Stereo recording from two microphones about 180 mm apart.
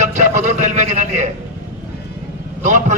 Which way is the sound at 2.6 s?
45° right (ahead or behind).